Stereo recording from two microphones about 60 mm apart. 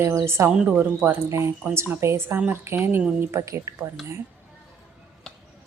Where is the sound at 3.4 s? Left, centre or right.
Right.